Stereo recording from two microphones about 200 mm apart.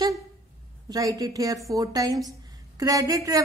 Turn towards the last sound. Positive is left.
turn(degrees=-15)  # may be behind; listen again after turning